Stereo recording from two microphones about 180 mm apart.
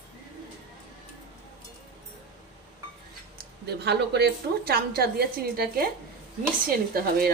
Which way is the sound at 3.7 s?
70° right (ahead or behind).